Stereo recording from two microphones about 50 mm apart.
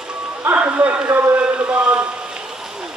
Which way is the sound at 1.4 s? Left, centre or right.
Right.